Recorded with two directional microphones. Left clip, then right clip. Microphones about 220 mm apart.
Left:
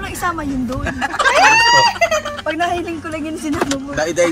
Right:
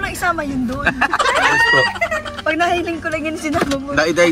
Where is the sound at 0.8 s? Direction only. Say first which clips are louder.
Right 1 dB; centre (ahead or behind).